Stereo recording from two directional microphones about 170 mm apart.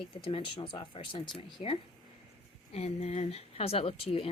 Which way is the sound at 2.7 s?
40° left (ahead or behind).